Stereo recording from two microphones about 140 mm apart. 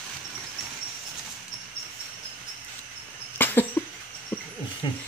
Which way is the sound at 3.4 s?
15° left (ahead or behind).